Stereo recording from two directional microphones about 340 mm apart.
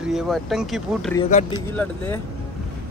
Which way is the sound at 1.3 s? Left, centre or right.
Centre.